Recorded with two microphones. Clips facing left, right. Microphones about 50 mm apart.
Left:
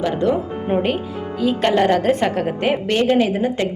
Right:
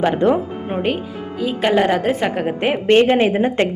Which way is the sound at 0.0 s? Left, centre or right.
Right.